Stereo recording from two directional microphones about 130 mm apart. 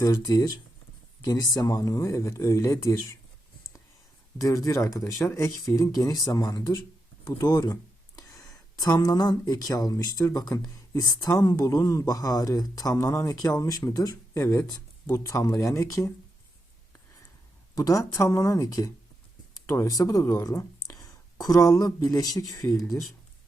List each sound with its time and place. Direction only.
1.2 s speech: 30° left (ahead or behind)
4.4 s speech: 25° left (ahead or behind)
17.7 s speech: 25° left (ahead or behind)